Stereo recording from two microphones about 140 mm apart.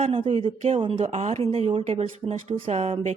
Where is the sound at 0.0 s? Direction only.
45° right (ahead or behind).